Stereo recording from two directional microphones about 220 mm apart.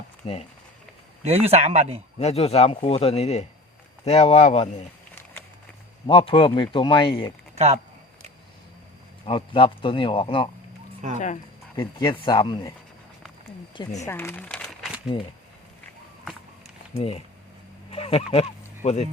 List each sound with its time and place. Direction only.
0.2 s speech: 25° left (ahead or behind)
1.2 s a man's voice: 25° right (ahead or behind)
2.1 s speech: 30° left (ahead or behind)
6.1 s speech: 25° left (ahead or behind)
7.5 s speech: 30° right (ahead or behind)
9.2 s speech: 25° left (ahead or behind)
11.0 s speech: 35° right (ahead or behind)
11.8 s speech: 20° left (ahead or behind)
14.0 s speech: 10° left (ahead or behind)
15.1 s speech: 25° left (ahead or behind)
17.0 s speech: 30° left (ahead or behind)